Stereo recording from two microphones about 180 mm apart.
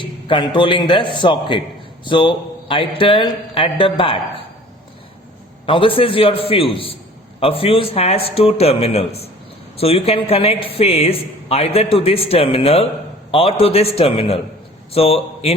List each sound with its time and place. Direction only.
0.0 s a man's voice: 25° left (ahead or behind)
5.6 s a man's voice: 30° left (ahead or behind)